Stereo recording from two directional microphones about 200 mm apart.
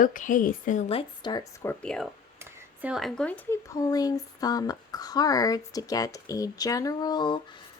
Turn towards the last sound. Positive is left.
turn(degrees=20)  # may be behind; listen again after turning